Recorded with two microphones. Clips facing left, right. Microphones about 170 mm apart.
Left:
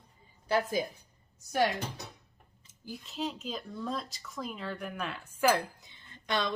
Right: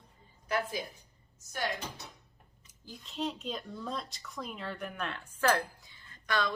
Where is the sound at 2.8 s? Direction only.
5° left (ahead or behind).